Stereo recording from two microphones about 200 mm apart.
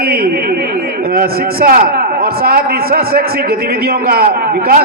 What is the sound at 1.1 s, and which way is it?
A man's voice, 50° right (ahead or behind).